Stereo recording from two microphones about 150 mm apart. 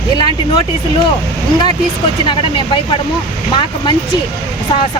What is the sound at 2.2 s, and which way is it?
Speech, 35° left (ahead or behind).